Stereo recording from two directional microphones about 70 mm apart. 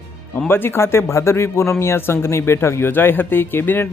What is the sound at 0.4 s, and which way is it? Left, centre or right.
Speech, left.